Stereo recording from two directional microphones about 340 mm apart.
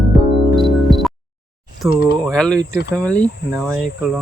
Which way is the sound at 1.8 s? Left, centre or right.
Centre.